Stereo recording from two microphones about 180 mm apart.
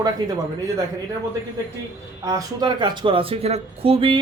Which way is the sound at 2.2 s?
20° right (ahead or behind).